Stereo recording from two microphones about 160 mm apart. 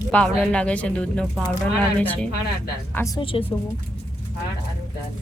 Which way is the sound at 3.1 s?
35° left (ahead or behind).